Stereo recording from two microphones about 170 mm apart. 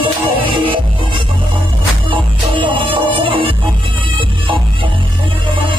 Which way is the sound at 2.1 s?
30° right (ahead or behind).